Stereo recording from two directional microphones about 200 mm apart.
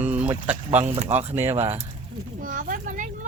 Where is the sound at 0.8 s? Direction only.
35° right (ahead or behind).